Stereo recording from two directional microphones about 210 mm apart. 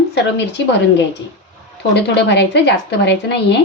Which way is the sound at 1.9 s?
55° left (ahead or behind).